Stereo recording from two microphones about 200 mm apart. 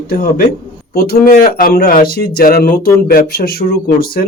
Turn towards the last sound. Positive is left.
turn(degrees=50)  # may be behind; listen again after turning